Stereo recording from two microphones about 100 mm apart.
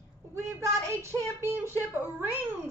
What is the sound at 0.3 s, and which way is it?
A woman's voice, 25° right (ahead or behind).